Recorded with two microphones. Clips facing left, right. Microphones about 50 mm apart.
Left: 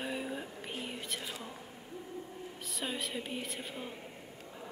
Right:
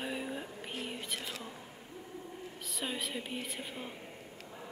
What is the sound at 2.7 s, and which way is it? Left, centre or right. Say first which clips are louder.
A woman's voice: even; centre.